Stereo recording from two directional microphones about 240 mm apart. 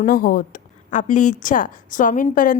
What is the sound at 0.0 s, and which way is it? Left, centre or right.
A woman's voice, left.